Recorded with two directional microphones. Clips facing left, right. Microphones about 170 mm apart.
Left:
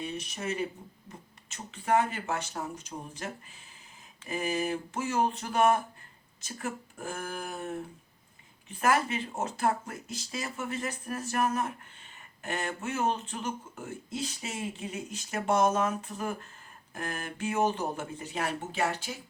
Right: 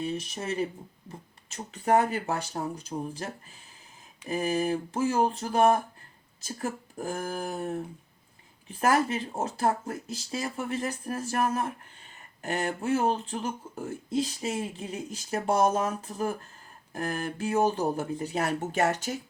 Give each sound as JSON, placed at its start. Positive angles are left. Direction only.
{"t": 0.0, "sound": "speech", "side_deg": -30}